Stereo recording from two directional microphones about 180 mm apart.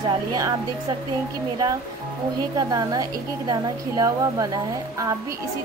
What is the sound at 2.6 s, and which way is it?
A woman's voice, 20° right (ahead or behind).